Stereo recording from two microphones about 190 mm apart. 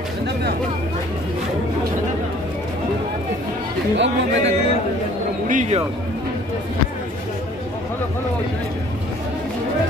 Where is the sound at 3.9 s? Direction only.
70° right (ahead or behind).